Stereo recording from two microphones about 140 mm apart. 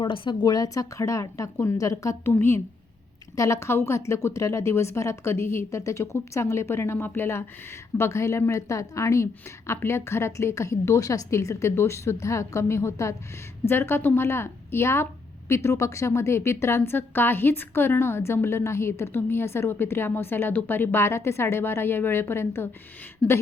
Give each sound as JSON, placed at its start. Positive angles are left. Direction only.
{"t": 0.0, "sound": "a woman's voice", "side_deg": 35}